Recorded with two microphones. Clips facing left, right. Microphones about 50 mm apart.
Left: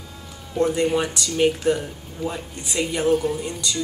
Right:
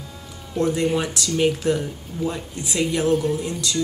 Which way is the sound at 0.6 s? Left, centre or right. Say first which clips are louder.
Left 1 dB; centre.